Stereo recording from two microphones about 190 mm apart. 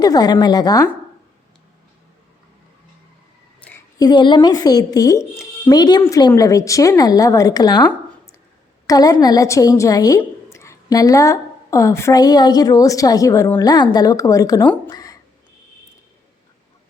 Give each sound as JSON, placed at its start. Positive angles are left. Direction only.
{"t": 0.0, "sound": "a woman's voice", "side_deg": 20}
{"t": 3.6, "sound": "a woman's voice", "side_deg": 10}
{"t": 8.9, "sound": "a woman's voice", "side_deg": 20}
{"t": 14.7, "sound": "a sound", "side_deg": 20}